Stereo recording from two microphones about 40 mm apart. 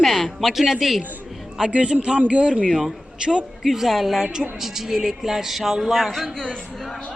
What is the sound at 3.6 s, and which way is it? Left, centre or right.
A woman's voice, centre.